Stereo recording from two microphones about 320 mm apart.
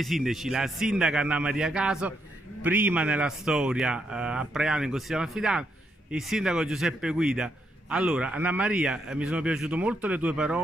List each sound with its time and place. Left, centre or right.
0.0 s a man's voice: centre